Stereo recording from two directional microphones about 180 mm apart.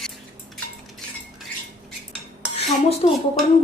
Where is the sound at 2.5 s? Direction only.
35° left (ahead or behind).